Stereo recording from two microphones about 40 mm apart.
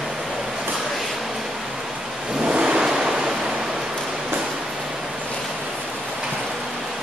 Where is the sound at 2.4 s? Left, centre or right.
Right.